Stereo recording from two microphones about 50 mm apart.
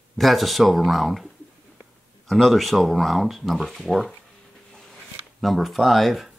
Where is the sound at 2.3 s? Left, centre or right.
Centre.